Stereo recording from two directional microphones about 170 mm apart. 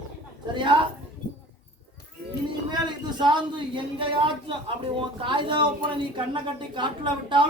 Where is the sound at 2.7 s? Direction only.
25° right (ahead or behind).